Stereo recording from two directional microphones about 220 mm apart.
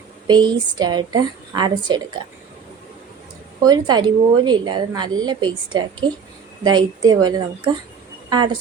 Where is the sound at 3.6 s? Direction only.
20° right (ahead or behind).